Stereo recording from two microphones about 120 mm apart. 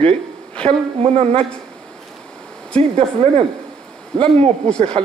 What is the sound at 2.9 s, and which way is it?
A man's voice, 55° right (ahead or behind).